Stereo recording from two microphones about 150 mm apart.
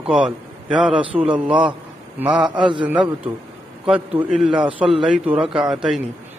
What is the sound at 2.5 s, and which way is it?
Speech, 35° right (ahead or behind).